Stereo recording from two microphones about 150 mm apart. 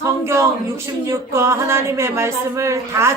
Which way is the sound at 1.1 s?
20° right (ahead or behind).